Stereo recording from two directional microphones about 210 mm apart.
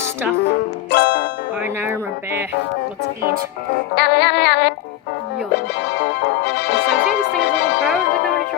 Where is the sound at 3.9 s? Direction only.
50° left (ahead or behind).